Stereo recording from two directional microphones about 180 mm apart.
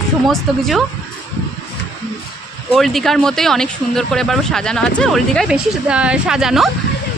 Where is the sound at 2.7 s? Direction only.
Centre (ahead or behind).